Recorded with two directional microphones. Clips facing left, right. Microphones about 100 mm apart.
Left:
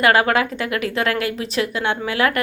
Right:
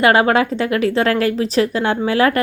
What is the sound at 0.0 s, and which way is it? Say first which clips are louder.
A woman's voice: right 3 dB; 25° right (ahead or behind).